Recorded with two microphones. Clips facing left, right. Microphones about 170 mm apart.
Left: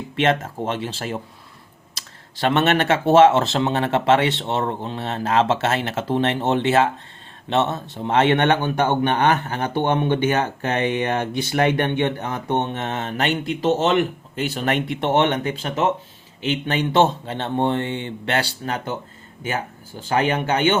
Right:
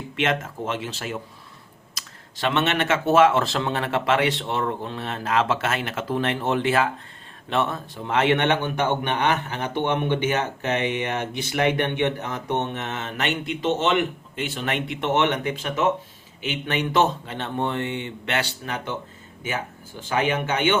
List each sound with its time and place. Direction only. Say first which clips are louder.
0.2 s speech: left 5 dB; 35° left (ahead or behind)
8.4 s a man's voice: left 3 dB; 40° left (ahead or behind)
20.0 s speech: left 3 dB; 35° left (ahead or behind)